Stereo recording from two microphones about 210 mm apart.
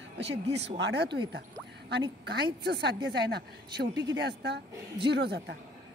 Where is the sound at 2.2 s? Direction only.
50° right (ahead or behind).